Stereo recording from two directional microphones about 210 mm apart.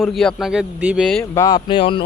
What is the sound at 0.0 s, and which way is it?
Speech, centre (ahead or behind).